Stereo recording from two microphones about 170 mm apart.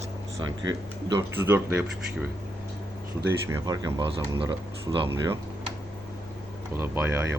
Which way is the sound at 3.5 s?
20° right (ahead or behind).